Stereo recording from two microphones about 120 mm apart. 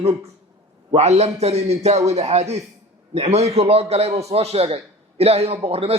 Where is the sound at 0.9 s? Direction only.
65° right (ahead or behind).